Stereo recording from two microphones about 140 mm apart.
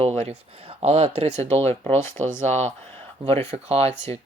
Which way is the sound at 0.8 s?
45° right (ahead or behind).